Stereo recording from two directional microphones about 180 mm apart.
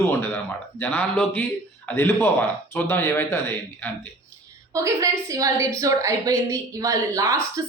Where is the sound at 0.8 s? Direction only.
10° left (ahead or behind).